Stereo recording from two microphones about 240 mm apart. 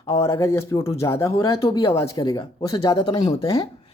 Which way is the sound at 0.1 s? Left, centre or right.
Centre.